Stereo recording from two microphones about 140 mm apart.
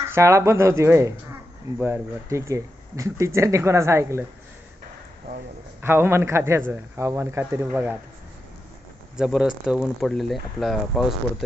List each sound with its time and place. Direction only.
0.1 s speech: 20° right (ahead or behind)
5.8 s speech: 15° right (ahead or behind)
9.1 s speech: 5° right (ahead or behind)